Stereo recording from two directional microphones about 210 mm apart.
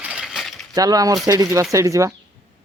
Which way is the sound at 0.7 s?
15° right (ahead or behind).